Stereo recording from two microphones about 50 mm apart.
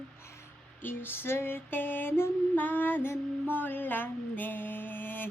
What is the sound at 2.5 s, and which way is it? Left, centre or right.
Music, left.